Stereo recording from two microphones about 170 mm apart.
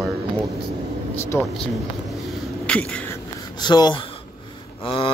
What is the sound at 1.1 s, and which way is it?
Speech, 15° left (ahead or behind).